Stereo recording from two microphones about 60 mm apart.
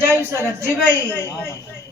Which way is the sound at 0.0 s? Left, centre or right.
Right.